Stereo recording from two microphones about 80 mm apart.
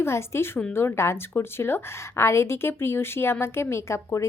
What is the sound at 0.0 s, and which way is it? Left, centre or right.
A woman's voice, left.